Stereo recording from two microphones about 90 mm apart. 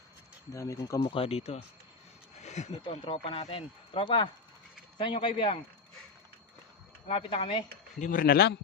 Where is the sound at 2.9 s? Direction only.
85° left; by 5.6 s 70° left (ahead or behind).